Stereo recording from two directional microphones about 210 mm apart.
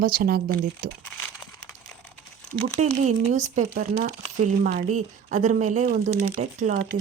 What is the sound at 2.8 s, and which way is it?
Speech, 35° right (ahead or behind).